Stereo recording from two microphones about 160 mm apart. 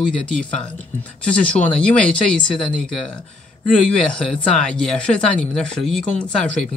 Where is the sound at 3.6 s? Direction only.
5° left (ahead or behind).